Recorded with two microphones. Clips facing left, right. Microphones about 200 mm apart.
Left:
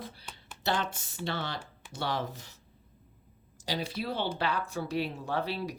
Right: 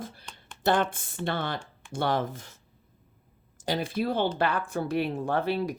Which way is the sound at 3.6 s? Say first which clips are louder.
Right 6 dB; 50° right (ahead or behind).